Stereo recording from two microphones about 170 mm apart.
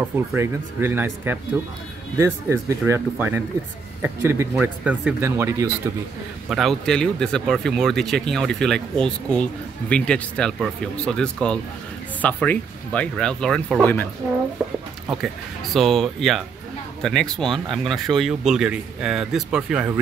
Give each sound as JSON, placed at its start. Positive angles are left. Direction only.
{"t": 0.1, "sound": "speech", "side_deg": -15}
{"t": 6.5, "sound": "speech", "side_deg": 0}
{"t": 15.0, "sound": "speech", "side_deg": 0}